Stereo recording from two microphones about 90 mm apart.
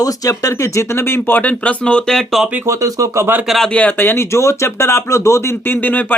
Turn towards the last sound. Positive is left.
turn(degrees=20)  # may be behind; listen again after turning